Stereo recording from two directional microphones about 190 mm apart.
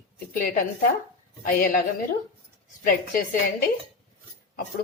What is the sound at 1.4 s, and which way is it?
Speech, 45° left (ahead or behind).